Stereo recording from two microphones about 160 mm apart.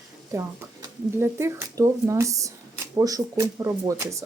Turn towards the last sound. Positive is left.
turn(degrees=-20)  # may be behind; listen again after turning